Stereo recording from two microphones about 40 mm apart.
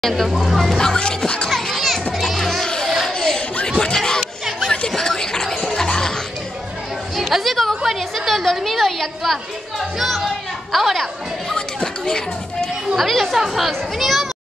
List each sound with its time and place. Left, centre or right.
0.0 s a woman's voice: centre
0.9 s speech: left
1.7 s children playing: centre
2.6 s music: centre
3.1 s a sound: left
4.6 s music: centre
7.2 s a woman's voice: centre
11.5 s speech: centre
12.9 s a woman's voice: centre